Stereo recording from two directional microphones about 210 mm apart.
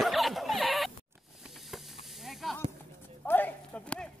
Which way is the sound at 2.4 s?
Centre (ahead or behind).